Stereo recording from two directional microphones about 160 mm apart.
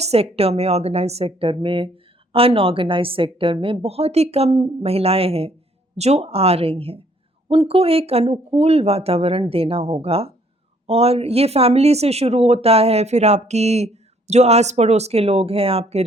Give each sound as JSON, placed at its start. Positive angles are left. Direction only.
{"t": 0.0, "sound": "speech", "side_deg": -40}